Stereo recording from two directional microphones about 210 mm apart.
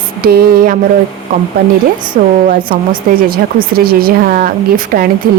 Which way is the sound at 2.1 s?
40° right (ahead or behind).